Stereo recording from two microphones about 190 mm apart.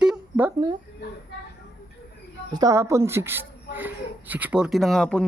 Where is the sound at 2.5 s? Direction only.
15° right (ahead or behind).